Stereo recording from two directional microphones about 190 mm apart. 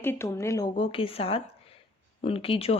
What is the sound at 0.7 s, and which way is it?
Speech, 30° left (ahead or behind).